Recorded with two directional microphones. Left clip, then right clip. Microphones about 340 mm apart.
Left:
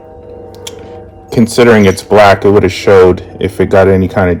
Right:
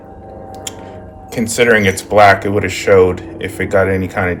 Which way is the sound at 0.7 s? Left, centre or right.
Centre.